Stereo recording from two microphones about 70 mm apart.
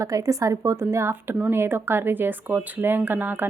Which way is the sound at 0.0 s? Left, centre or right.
Right.